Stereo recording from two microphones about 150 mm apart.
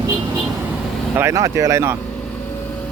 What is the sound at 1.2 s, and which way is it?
Speech, 20° right (ahead or behind).